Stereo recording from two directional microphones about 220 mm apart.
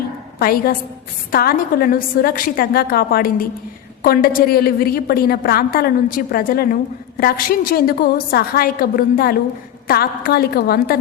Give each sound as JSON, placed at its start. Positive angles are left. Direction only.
{"t": 0.3, "sound": "a woman's voice", "side_deg": 45}